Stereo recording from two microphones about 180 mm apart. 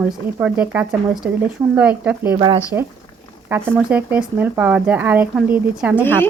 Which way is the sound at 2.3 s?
25° right (ahead or behind).